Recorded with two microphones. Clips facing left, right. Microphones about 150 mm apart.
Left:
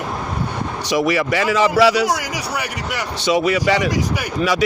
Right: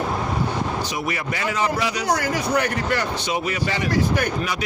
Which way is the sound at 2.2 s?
10° left (ahead or behind).